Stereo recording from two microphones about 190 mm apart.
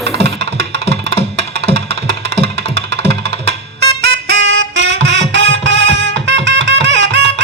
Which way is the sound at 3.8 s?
60° right (ahead or behind).